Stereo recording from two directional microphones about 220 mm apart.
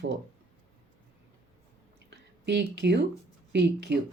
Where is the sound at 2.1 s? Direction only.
50° right (ahead or behind).